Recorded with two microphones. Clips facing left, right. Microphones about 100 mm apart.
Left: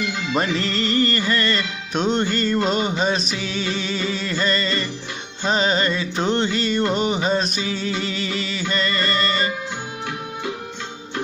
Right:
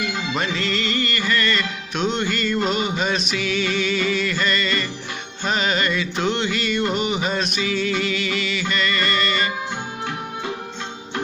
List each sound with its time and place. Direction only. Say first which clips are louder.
0.4 s music: left 3 dB; 35° left (ahead or behind)